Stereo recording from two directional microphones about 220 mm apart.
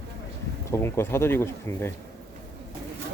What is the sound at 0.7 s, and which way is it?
Speech, 10° left (ahead or behind).